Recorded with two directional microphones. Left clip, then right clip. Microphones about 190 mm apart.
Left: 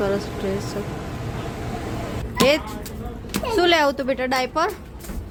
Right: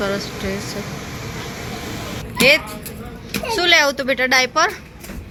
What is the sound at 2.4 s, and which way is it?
Speech, 20° left (ahead or behind).